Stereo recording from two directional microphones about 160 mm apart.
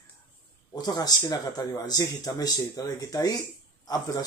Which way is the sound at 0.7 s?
25° left (ahead or behind).